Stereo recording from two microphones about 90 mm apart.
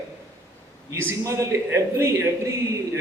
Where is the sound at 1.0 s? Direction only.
30° right (ahead or behind).